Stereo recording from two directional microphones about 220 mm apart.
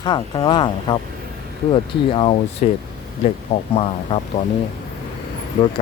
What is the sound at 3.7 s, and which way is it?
Speech, 25° left (ahead or behind).